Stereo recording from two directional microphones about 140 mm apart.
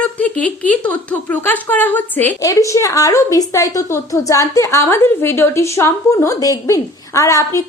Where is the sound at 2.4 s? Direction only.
25° left (ahead or behind).